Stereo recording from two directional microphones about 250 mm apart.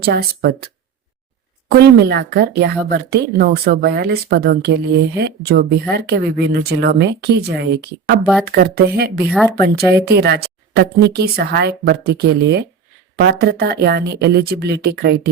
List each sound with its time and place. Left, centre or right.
0.0 s speech: right
1.7 s speech: right